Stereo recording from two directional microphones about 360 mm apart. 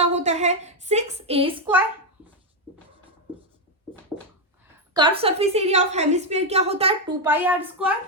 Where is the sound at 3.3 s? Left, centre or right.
Centre.